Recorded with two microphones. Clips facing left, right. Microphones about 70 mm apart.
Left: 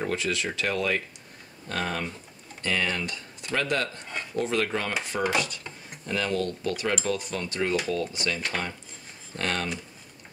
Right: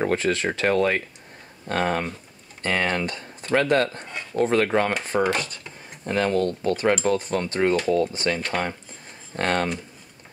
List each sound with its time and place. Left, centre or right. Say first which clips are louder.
0.0 s speech: right 6 dB; right